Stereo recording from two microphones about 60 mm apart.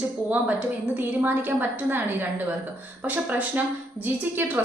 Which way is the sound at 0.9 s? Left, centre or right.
Right.